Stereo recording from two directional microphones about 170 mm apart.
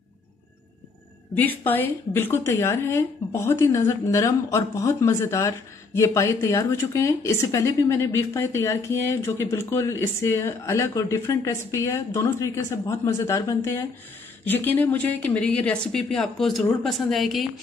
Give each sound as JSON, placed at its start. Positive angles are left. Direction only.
{"t": 1.3, "sound": "speech", "side_deg": 10}